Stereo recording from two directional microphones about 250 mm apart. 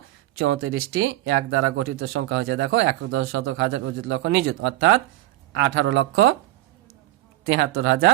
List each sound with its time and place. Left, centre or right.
0.3 s speech: right
7.4 s speech: right